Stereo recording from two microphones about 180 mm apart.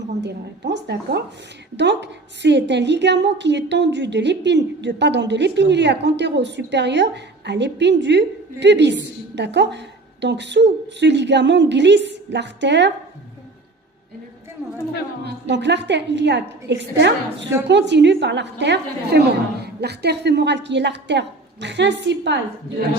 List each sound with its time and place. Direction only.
0.2 s a woman's voice: 75° right (ahead or behind)
15.2 s a woman's voice: 75° right (ahead or behind)